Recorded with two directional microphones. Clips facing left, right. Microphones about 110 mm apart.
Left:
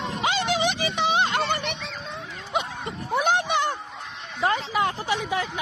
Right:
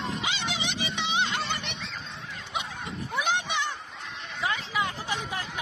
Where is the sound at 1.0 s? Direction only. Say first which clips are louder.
Left 7 dB; 50° left (ahead or behind).